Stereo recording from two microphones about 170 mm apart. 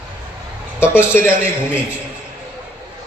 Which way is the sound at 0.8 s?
15° left (ahead or behind).